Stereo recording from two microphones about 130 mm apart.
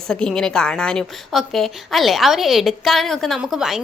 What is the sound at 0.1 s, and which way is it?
A woman's voice, 5° left (ahead or behind).